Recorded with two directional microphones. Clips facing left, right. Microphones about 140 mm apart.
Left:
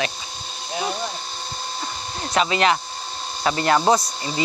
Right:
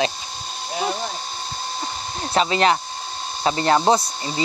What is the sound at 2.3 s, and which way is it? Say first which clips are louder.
Speech: right 1 dB; 35° right (ahead or behind).